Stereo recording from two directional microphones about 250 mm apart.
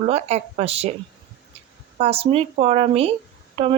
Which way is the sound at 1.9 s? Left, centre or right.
Right.